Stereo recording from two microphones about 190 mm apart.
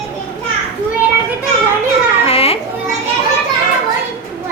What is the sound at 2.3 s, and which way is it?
Children playing, 30° left (ahead or behind).